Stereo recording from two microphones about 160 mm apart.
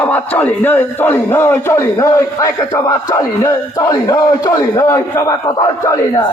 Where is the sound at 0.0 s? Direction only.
10° left (ahead or behind).